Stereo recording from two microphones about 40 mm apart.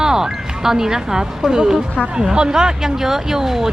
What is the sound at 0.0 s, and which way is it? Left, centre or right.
Speech, centre.